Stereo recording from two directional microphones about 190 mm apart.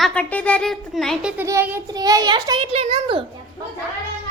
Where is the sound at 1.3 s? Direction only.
15° right (ahead or behind).